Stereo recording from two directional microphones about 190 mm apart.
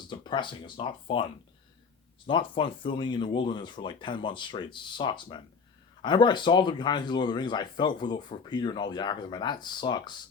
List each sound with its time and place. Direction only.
0.1 s speech: 25° left (ahead or behind)